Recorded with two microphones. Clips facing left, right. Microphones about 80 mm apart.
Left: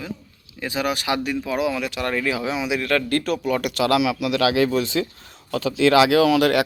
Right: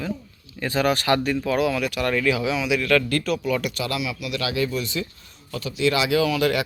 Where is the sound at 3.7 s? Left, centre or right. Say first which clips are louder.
Left 8 dB; left.